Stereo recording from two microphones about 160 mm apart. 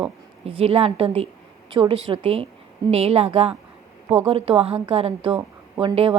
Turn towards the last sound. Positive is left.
turn(degrees=-35)  # may be behind; listen again after turning